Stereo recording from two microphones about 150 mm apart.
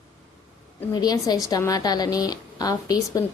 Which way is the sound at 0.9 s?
25° left (ahead or behind).